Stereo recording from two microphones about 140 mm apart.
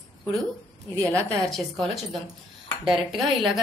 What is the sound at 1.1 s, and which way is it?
Speech, 5° left (ahead or behind).